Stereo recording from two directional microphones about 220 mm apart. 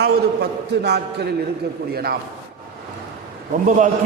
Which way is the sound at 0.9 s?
50° right (ahead or behind).